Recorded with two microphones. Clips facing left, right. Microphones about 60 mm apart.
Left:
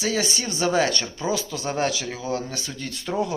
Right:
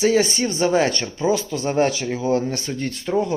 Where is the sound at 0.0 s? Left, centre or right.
Right.